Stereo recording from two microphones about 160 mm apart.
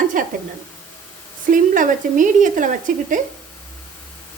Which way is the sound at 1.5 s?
55° right (ahead or behind).